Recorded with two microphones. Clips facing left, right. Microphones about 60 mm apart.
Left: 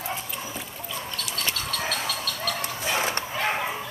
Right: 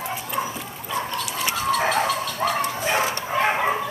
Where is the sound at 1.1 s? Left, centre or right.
Centre.